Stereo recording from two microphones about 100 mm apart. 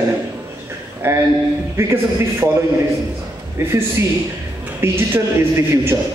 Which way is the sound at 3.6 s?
25° right (ahead or behind).